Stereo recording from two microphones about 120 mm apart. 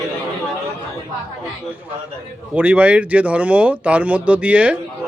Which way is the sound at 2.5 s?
10° right (ahead or behind).